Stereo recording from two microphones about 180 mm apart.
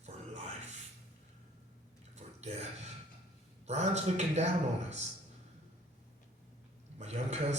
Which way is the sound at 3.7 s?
40° right (ahead or behind).